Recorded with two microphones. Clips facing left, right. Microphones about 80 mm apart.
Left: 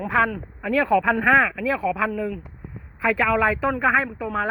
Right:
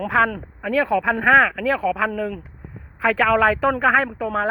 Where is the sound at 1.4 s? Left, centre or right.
Right.